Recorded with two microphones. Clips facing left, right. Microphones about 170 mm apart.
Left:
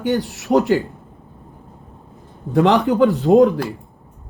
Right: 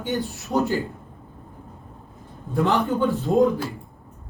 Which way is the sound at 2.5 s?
75° left (ahead or behind).